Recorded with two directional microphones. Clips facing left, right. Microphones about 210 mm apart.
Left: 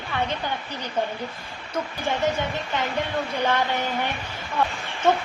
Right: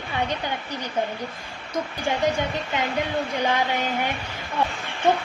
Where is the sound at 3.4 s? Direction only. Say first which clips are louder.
Left 1 dB; 10° right (ahead or behind).